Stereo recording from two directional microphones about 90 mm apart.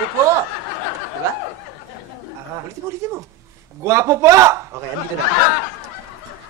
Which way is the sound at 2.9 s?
30° right (ahead or behind).